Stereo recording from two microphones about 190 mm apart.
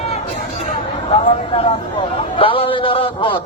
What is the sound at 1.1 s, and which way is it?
A man's voice, 30° left (ahead or behind).